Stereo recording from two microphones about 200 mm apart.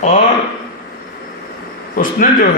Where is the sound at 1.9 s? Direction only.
45° left (ahead or behind).